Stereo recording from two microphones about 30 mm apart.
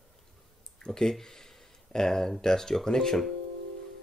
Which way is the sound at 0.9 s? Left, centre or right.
Centre.